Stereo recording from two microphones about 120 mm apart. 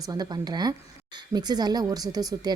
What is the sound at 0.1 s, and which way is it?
A woman's voice, 35° right (ahead or behind).